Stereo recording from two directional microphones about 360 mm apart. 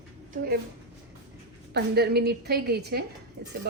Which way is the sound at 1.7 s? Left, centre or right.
Right.